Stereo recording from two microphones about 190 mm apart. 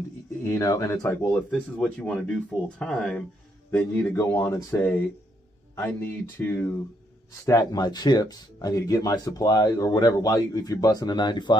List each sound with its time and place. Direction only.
0.5 s speech: 15° left (ahead or behind)